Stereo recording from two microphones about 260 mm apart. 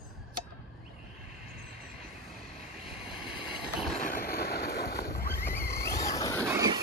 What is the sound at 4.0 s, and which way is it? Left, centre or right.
Boat, left.